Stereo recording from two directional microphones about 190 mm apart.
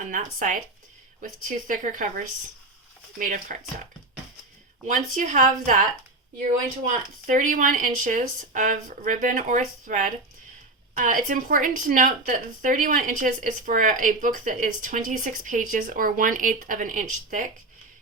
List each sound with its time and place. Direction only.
0.0 s a woman's voice: 40° right (ahead or behind)
4.9 s a woman's voice: 40° right (ahead or behind)
6.8 s a woman's voice: 40° right (ahead or behind)